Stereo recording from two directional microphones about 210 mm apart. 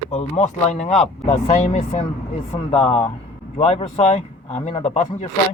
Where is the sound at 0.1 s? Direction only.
30° left (ahead or behind).